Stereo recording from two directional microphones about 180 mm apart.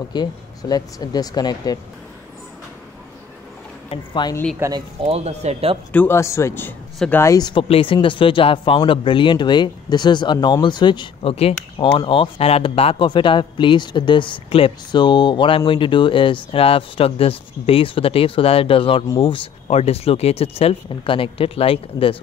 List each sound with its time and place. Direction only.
0.1 s a man's voice: 20° left (ahead or behind)
3.9 s a man's voice: 25° left (ahead or behind)
4.6 s speech: 20° right (ahead or behind)
5.0 s speech: 35° right (ahead or behind)
5.9 s a man's voice: 15° left (ahead or behind); by 22.1 s 30° left (ahead or behind)